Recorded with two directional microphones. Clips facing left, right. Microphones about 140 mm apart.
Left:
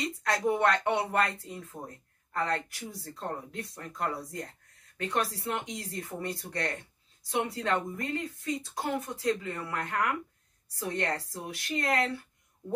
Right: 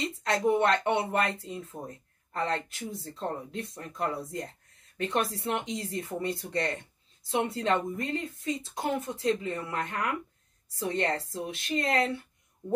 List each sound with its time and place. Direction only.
0.0 s speech: 25° right (ahead or behind)